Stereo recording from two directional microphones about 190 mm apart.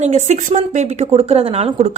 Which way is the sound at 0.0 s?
40° right (ahead or behind).